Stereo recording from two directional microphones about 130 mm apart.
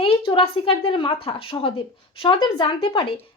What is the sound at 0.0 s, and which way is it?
A woman's voice, 45° left (ahead or behind).